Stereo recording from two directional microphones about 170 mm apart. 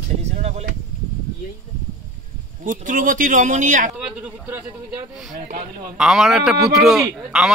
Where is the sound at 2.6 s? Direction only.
50° right (ahead or behind).